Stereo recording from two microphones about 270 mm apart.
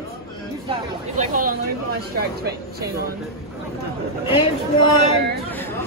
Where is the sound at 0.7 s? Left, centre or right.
Right.